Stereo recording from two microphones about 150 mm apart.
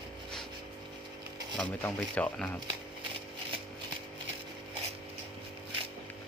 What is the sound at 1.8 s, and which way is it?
Speech, 10° left (ahead or behind).